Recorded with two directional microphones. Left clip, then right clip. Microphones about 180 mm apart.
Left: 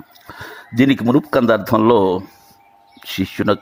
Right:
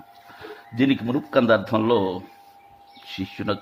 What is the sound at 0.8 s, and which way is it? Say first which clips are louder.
A man's voice: left 8 dB; 45° left (ahead or behind).